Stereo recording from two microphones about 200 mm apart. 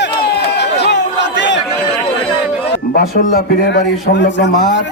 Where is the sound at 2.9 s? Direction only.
50° left (ahead or behind).